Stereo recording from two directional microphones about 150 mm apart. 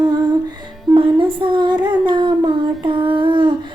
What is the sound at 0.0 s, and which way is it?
Music, 30° right (ahead or behind).